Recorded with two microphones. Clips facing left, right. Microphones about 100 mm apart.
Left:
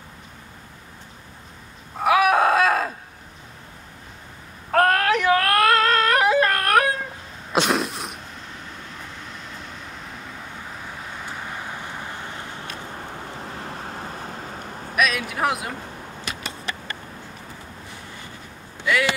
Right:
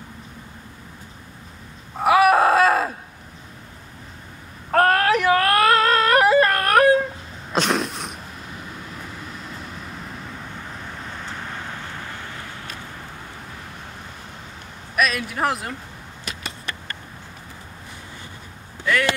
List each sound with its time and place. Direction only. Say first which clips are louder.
2.0 s a sound: right 2 dB; centre (ahead or behind)
4.6 s yodeling: right 1 dB; centre (ahead or behind)
7.5 s throat clearing: even; centre (ahead or behind)
8.9 s vehicle: right 2 dB; 5° right (ahead or behind)
11.2 s vehicle: left 1 dB; 10° left (ahead or behind)
13.6 s vehicle: left 5 dB; 40° left (ahead or behind)
15.0 s a sound: right 1 dB; centre (ahead or behind)
18.9 s speech: right 1 dB; 5° left (ahead or behind)